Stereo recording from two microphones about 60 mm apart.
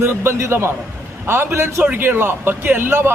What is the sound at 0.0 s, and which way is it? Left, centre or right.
A man's voice, right.